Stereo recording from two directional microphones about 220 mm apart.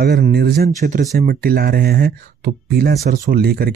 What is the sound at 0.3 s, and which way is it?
Speech, 45° right (ahead or behind).